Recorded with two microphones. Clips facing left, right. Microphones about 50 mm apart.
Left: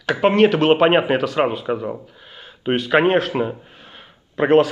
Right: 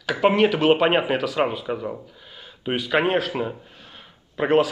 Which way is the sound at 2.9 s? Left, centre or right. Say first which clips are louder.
Left 5 dB; centre.